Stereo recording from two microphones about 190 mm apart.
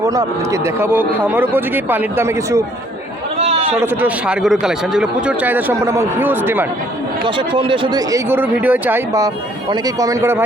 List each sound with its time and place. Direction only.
0.0 s speech: 15° right (ahead or behind)
3.3 s a sound: 35° right (ahead or behind)
3.8 s speech: 10° right (ahead or behind)
7.3 s speech: 25° right (ahead or behind)